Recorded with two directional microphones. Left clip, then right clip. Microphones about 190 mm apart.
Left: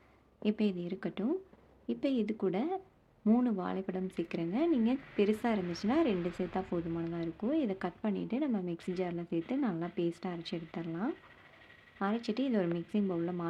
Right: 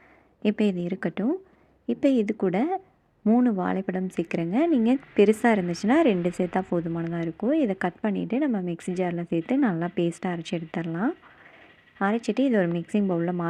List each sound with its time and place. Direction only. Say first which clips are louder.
0.4 s speech: right 9 dB; 35° right (ahead or behind)